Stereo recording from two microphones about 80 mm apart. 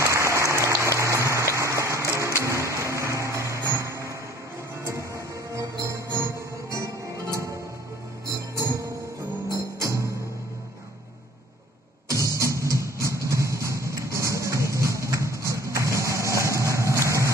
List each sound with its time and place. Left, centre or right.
0.0 s applause: right
2.4 s a sound: right
4.8 s music: right
8.3 s music: right
12.1 s music: right